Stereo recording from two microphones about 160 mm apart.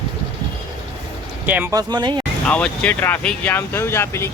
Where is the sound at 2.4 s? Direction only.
5° left (ahead or behind).